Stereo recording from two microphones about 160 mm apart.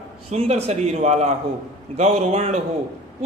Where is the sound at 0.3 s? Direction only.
40° right (ahead or behind).